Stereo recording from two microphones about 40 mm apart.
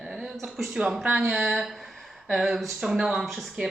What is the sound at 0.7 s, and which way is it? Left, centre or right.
Speech, right.